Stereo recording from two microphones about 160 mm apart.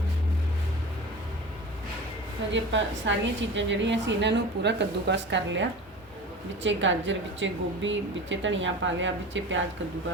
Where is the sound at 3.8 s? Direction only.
90° right.